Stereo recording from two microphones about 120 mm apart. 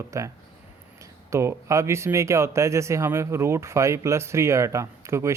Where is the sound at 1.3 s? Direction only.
25° right (ahead or behind).